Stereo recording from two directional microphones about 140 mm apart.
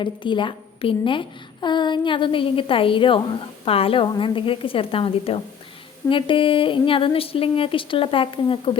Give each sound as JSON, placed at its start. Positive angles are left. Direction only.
{"t": 0.0, "sound": "speech", "side_deg": 35}